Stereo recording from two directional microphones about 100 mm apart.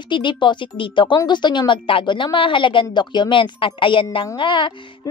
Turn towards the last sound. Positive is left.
turn(degrees=55)  # may be behind; listen again after turning